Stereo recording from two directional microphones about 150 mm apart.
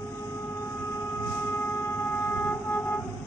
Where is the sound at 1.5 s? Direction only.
15° left (ahead or behind).